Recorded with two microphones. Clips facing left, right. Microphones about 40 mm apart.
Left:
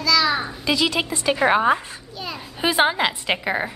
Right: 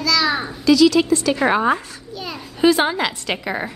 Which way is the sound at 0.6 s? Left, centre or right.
Left.